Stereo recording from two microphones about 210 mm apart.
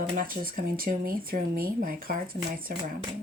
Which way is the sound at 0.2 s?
40° right (ahead or behind).